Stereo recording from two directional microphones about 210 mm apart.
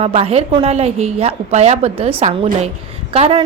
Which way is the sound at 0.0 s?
30° right (ahead or behind).